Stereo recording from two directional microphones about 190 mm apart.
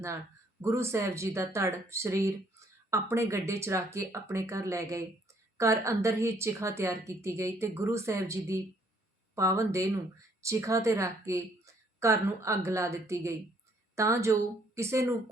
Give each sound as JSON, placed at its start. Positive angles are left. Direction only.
{"t": 0.6, "sound": "a woman's voice", "side_deg": -15}